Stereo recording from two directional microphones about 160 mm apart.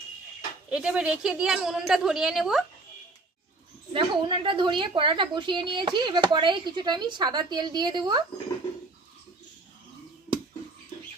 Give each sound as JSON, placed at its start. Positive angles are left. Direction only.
{"t": 0.7, "sound": "a woman's voice", "side_deg": -5}
{"t": 3.9, "sound": "a woman's voice", "side_deg": -30}